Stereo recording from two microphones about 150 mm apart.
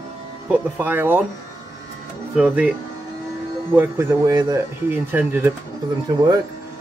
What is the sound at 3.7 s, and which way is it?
Speech, 15° right (ahead or behind).